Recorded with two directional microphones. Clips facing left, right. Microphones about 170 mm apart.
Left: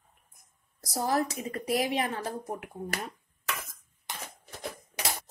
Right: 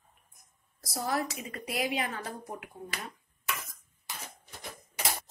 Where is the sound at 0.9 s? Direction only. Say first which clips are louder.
Left 4 dB; 35° left (ahead or behind).